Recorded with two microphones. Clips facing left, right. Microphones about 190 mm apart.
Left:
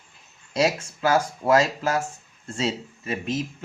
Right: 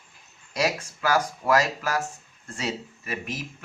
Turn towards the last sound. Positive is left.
turn(degrees=25)  # may be behind; listen again after turning